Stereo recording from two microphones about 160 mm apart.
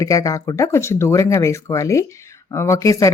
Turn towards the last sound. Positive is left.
turn(degrees=20)  # may be behind; listen again after turning